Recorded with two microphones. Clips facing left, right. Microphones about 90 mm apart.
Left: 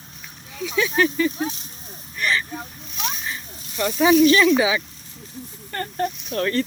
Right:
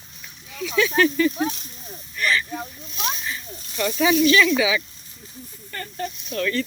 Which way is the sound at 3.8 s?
25° left (ahead or behind).